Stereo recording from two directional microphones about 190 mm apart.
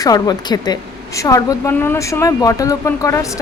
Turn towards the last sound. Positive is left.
turn(degrees=15)  # may be behind; listen again after turning